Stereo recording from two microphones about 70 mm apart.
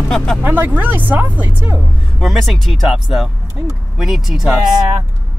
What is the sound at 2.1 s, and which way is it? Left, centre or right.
Speech, centre.